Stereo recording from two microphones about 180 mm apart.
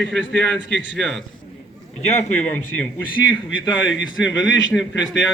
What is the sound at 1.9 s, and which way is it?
Speech, 40° left (ahead or behind).